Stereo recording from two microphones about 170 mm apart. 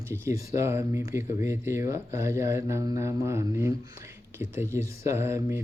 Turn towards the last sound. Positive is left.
turn(degrees=-15)  # may be behind; listen again after turning